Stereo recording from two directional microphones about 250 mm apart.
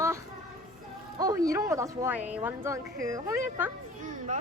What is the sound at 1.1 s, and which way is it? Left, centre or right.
A woman's voice, centre.